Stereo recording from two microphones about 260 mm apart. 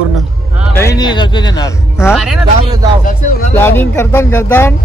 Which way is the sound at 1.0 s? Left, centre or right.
Centre.